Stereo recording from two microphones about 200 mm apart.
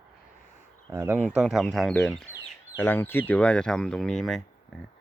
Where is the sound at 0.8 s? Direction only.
15° right (ahead or behind).